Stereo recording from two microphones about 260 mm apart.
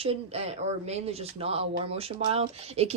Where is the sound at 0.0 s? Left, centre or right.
Right.